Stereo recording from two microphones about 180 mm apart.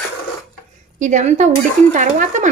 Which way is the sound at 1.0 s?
45° right (ahead or behind).